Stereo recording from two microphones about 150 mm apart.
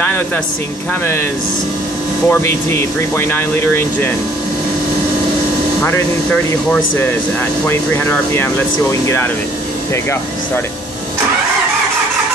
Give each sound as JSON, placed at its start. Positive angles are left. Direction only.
{"t": 2.2, "sound": "speech", "side_deg": 15}
{"t": 5.9, "sound": "speech", "side_deg": 15}